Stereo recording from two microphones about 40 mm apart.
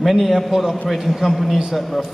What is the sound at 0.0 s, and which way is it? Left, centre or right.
A man's voice, centre.